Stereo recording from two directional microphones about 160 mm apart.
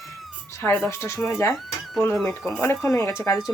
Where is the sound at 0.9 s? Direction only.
15° left (ahead or behind).